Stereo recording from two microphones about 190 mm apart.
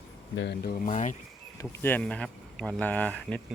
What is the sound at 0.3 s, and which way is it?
Speech, 55° left (ahead or behind).